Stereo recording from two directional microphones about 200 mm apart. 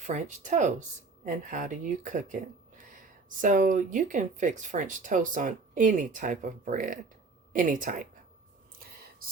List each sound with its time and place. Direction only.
0.0 s speech: 35° right (ahead or behind)